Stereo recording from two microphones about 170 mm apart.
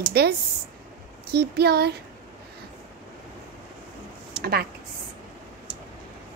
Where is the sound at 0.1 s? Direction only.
70° right (ahead or behind).